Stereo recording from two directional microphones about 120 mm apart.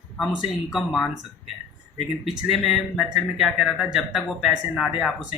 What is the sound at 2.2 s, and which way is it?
Speech, centre (ahead or behind).